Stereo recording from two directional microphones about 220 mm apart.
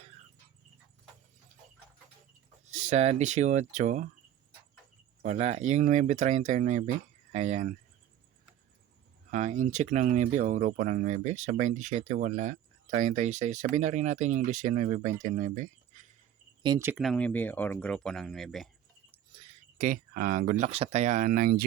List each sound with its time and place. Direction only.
2.7 s speech: 30° right (ahead or behind)
5.2 s speech: 30° right (ahead or behind)
9.3 s speech: 35° right (ahead or behind)
16.6 s speech: 10° right (ahead or behind)
17.0 s speech: 5° left (ahead or behind)
19.3 s a sound: 25° right (ahead or behind)
19.8 s speech: 40° right (ahead or behind)